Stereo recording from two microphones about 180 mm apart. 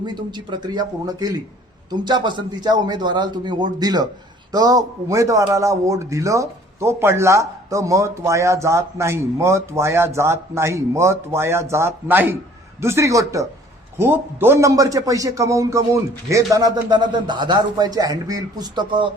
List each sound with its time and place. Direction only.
0.0 s a man's voice: 25° right (ahead or behind)